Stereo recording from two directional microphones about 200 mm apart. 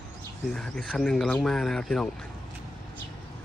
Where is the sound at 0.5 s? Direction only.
5° left (ahead or behind).